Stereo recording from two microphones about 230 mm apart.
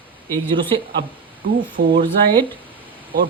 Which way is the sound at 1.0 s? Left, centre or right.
Right.